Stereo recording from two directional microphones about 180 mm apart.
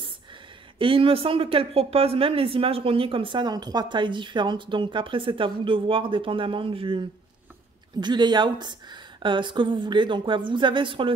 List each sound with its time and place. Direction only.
0.7 s speech: 30° right (ahead or behind)